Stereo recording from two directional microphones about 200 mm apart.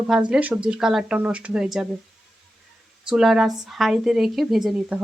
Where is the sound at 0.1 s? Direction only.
5° right (ahead or behind).